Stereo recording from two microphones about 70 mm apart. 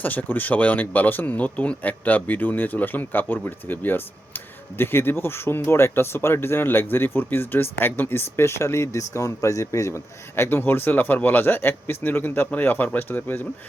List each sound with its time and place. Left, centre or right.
0.0 s speech: left